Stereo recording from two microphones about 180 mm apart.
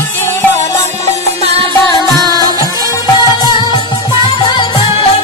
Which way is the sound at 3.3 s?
25° left (ahead or behind).